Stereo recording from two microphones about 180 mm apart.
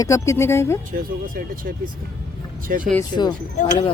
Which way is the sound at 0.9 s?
50° right (ahead or behind).